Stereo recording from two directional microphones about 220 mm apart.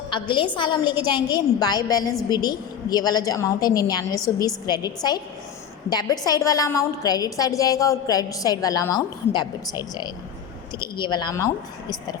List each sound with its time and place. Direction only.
0.1 s a woman's voice: 20° left (ahead or behind)